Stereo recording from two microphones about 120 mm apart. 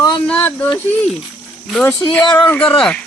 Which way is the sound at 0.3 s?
15° left (ahead or behind).